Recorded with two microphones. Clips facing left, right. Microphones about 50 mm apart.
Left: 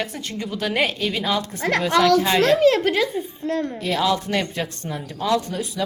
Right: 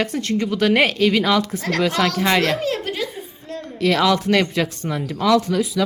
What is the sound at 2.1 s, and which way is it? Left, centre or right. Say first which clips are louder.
Speech: left 2 dB; right.